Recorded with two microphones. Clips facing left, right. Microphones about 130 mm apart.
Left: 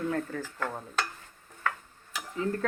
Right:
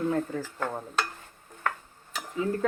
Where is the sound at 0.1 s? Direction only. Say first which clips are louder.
Right 3 dB; 25° right (ahead or behind).